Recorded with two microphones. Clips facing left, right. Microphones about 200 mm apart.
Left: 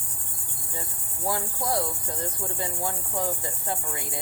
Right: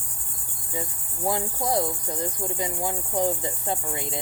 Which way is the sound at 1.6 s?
20° right (ahead or behind).